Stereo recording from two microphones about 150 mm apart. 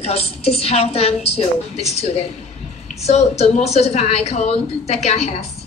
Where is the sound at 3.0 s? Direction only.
50° left (ahead or behind).